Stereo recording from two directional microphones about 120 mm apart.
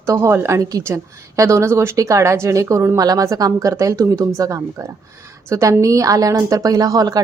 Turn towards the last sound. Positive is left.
turn(degrees=-30)  # may be behind; listen again after turning